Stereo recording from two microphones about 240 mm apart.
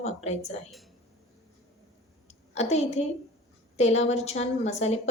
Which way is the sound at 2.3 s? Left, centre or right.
Left.